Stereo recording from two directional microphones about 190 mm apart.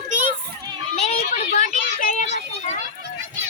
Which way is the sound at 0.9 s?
35° left (ahead or behind).